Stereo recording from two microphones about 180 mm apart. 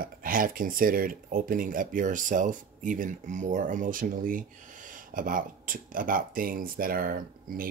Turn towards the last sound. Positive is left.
turn(degrees=-50)  # may be behind; listen again after turning